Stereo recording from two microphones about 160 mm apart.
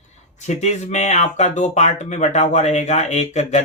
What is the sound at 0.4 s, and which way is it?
Speech, 45° left (ahead or behind).